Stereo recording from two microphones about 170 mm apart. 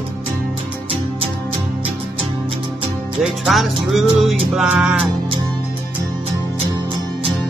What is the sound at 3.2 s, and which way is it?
Music, centre (ahead or behind).